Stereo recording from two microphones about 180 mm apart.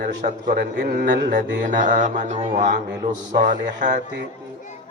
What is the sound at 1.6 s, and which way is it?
Mantra, 45° right (ahead or behind).